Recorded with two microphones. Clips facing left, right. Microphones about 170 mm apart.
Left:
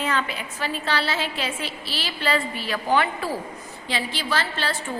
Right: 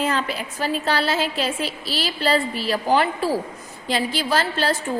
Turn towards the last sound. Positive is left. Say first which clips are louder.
# right 5 dB
turn(degrees=-40)  # may be behind; listen again after turning